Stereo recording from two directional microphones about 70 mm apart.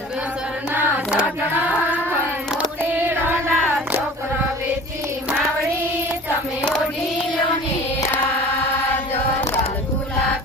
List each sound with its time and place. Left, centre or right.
0.7 s hands: right
1.1 s choir: right
2.9 s carnatic music: right